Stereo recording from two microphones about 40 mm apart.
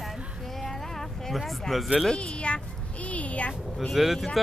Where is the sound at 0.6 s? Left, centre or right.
Centre.